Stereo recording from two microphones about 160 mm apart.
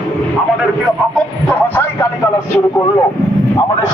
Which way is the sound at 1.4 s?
10° left (ahead or behind).